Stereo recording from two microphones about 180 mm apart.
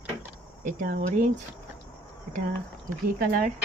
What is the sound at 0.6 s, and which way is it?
Speech, 50° right (ahead or behind).